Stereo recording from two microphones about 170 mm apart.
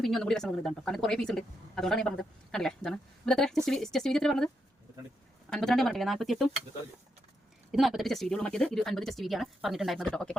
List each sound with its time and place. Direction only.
0.0 s speech: centre (ahead or behind)
5.5 s speech: centre (ahead or behind)
7.7 s speech: centre (ahead or behind)